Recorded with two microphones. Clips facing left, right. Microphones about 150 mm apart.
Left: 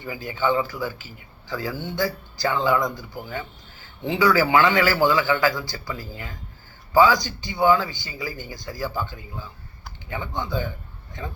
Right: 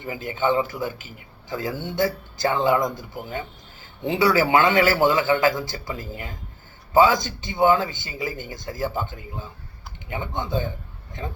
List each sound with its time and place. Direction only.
0.0 s a man's voice: 20° right (ahead or behind)